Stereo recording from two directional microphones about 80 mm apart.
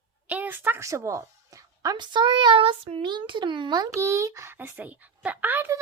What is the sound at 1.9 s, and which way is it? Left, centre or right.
A child's voice, right.